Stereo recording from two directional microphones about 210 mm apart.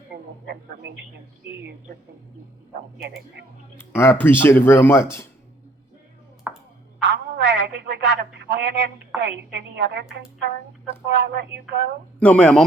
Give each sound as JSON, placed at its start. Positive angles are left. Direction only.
{"t": 0.1, "sound": "music", "side_deg": -50}
{"t": 0.4, "sound": "speech", "side_deg": -55}
{"t": 3.8, "sound": "speech", "side_deg": 10}
{"t": 6.5, "sound": "ping", "side_deg": -5}
{"t": 7.0, "sound": "a sound", "side_deg": -55}
{"t": 11.0, "sound": "speech", "side_deg": -55}
{"t": 12.2, "sound": "speech", "side_deg": 5}